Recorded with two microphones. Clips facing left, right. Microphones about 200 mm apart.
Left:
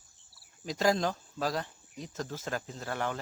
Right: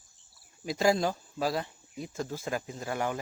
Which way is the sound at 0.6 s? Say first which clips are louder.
Right 2 dB; 10° right (ahead or behind).